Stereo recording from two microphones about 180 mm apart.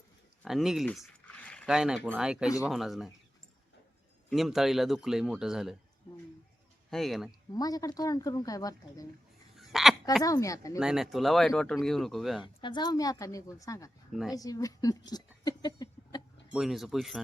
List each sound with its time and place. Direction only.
0.4 s speech: centre (ahead or behind)
4.3 s speech: centre (ahead or behind)
6.9 s speech: centre (ahead or behind)
7.3 s speech: 20° left (ahead or behind)
9.6 s a sound: centre (ahead or behind)
10.2 s speech: 20° left (ahead or behind)
10.8 s speech: 5° right (ahead or behind)
12.4 s speech: 25° left (ahead or behind)
14.1 s speech: centre (ahead or behind)
14.3 s speech: 20° left (ahead or behind)
16.5 s speech: centre (ahead or behind)